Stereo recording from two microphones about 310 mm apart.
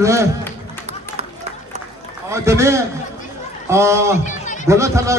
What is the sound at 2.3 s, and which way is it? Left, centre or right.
A man's voice, centre.